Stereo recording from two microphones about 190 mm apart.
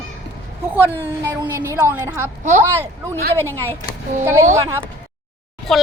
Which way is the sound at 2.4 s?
40° right (ahead or behind).